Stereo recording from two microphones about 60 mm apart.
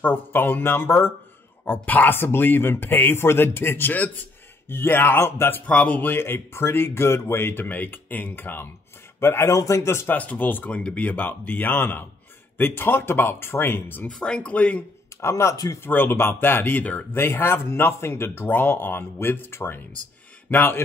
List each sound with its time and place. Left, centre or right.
0.0 s a man's voice: left
5.7 s speech: left
7.6 s speech: left
9.5 s speech: left
10.0 s speech: left
10.7 s speech: centre; by 14.0 s left
14.0 s speech: centre
15.1 s speech: left
15.5 s speech: left
15.8 s a man's voice: left